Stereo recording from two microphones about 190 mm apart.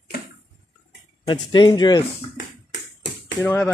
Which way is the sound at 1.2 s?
25° left (ahead or behind).